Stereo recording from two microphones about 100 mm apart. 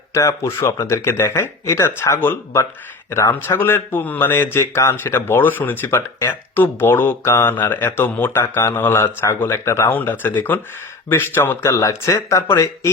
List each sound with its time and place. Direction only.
0.1 s speech: 30° left (ahead or behind)